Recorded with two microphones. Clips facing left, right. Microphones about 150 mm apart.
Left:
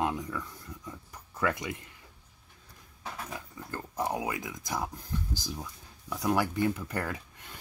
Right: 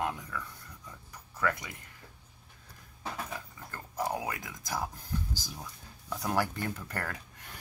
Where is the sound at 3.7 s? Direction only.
20° left (ahead or behind).